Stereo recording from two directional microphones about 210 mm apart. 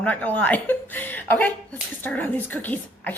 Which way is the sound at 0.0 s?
5° left (ahead or behind).